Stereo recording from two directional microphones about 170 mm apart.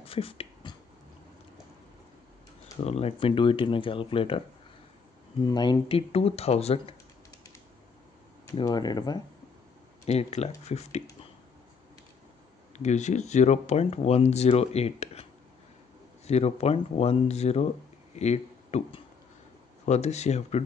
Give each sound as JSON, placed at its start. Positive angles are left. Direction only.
{"t": 0.0, "sound": "a sound", "side_deg": 35}
{"t": 2.8, "sound": "speech", "side_deg": 35}
{"t": 5.4, "sound": "speech", "side_deg": 25}
{"t": 8.5, "sound": "speech", "side_deg": 25}
{"t": 10.0, "sound": "speech", "side_deg": 40}
{"t": 12.7, "sound": "speech", "side_deg": 45}
{"t": 16.3, "sound": "speech", "side_deg": 40}